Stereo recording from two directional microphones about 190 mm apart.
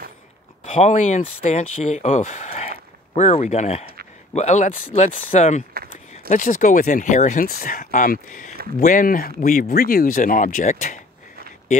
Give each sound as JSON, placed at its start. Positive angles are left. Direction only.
{"t": 0.7, "sound": "speech", "side_deg": 40}